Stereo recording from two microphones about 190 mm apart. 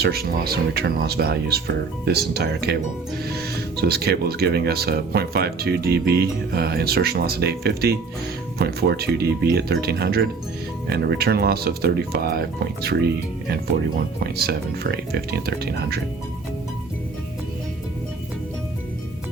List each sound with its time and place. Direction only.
0.0 s speech: 55° right (ahead or behind)
14.3 s speech: 55° right (ahead or behind)